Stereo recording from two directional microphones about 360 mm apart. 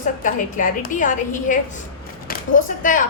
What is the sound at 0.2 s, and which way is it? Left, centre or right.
A woman's voice, left.